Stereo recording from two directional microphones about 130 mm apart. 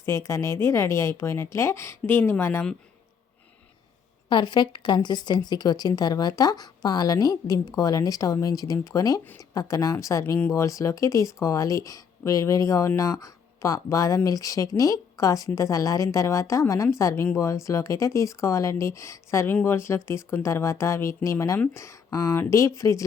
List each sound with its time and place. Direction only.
0.0 s speech: 25° left (ahead or behind)
4.3 s speech: 35° left (ahead or behind)